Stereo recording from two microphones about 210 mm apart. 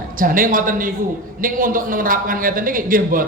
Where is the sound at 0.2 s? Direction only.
40° right (ahead or behind).